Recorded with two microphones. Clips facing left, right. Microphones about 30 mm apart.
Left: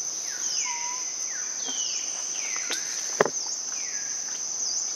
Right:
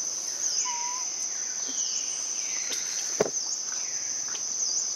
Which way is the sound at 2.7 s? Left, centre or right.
Left.